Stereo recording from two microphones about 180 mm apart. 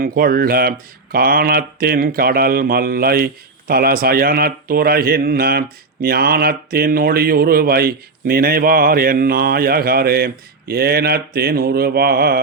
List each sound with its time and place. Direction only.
0.0 s speech: 55° right (ahead or behind)